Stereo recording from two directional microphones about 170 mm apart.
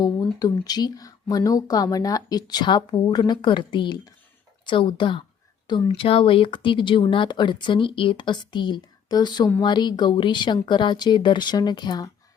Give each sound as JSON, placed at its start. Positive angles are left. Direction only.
{"t": 0.0, "sound": "speech", "side_deg": 20}